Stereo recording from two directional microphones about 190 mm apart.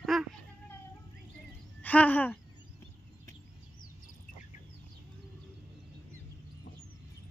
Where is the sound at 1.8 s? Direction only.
10° left (ahead or behind).